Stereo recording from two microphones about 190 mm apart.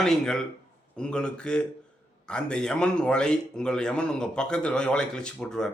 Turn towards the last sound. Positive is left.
turn(degrees=5)  # may be behind; listen again after turning